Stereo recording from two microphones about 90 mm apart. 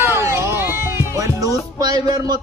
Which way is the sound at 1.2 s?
40° right (ahead or behind).